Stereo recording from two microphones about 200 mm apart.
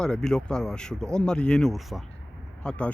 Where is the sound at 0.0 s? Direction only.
5° left (ahead or behind).